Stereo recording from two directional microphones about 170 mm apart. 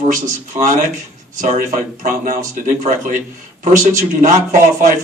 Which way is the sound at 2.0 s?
50° right (ahead or behind).